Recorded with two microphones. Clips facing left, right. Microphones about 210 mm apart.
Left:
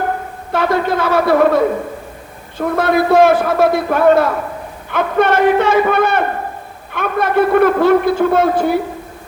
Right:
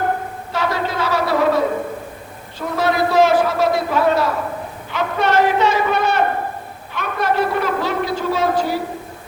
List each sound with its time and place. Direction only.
0.5 s a man's voice: 55° left (ahead or behind)